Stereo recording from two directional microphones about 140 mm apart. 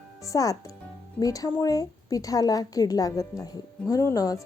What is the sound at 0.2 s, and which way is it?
Speech, 25° left (ahead or behind).